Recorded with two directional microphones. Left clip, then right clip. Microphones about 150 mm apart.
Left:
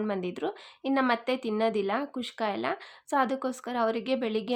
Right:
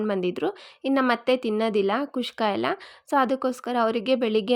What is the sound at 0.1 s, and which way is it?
A woman's voice, 40° right (ahead or behind).